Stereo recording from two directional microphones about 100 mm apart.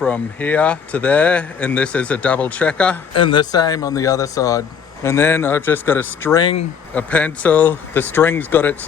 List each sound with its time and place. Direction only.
0.0 s speech: 15° left (ahead or behind)
3.1 s speech: 55° left (ahead or behind)
3.5 s speech: 40° left (ahead or behind); by 8.7 s 15° left (ahead or behind)